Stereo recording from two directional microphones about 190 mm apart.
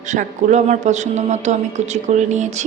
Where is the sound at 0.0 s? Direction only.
40° right (ahead or behind).